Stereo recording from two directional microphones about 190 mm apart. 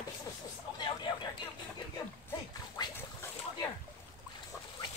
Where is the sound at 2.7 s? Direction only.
20° left (ahead or behind).